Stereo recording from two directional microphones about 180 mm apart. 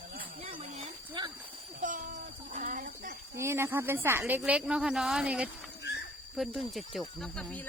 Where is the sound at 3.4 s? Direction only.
15° right (ahead or behind).